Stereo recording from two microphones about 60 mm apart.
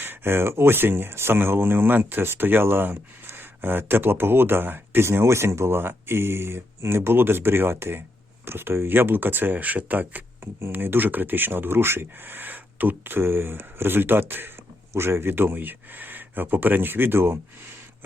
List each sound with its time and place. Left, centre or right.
0.0 s speech: right